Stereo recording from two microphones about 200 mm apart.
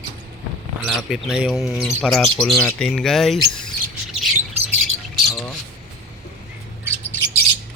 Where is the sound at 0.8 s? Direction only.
Centre (ahead or behind).